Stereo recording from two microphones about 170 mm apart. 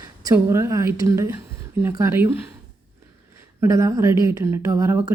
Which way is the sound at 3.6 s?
20° right (ahead or behind).